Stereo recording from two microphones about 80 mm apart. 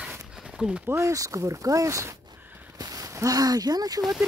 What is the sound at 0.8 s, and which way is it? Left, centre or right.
Speech, right.